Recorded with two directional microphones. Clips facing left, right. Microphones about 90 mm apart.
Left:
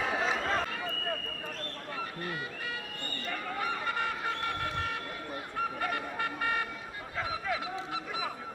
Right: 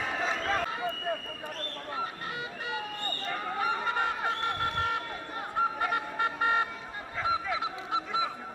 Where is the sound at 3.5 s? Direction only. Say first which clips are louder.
Right 4 dB; 20° right (ahead or behind).